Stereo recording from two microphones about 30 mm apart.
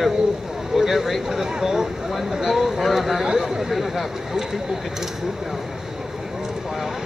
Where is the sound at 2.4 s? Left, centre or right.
Centre.